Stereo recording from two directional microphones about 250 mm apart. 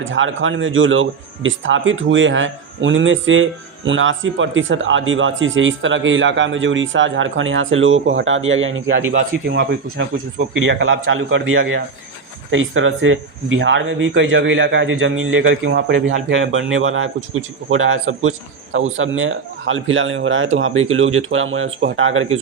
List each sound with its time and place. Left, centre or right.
0.0 s a man's voice: right